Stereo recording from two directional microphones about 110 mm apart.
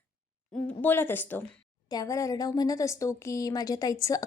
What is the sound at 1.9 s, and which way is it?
A woman's voice, 30° left (ahead or behind).